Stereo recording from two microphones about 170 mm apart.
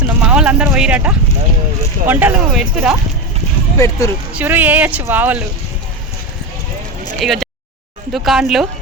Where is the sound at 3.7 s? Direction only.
20° left (ahead or behind).